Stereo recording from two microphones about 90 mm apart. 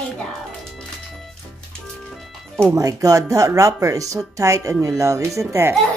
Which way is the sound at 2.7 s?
40° right (ahead or behind).